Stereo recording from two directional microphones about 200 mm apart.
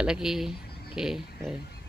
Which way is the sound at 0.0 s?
5° right (ahead or behind).